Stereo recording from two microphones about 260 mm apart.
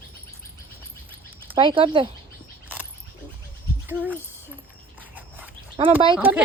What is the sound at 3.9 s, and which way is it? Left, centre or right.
Speech, centre.